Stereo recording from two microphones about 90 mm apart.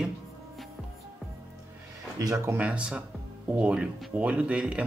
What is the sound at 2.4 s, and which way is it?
Speech, 15° right (ahead or behind).